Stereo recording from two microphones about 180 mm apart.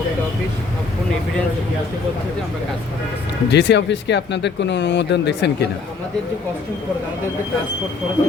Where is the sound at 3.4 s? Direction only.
70° left (ahead or behind).